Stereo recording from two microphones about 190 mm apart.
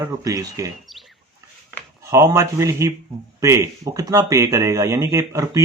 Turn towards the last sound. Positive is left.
turn(degrees=-15)  # may be behind; listen again after turning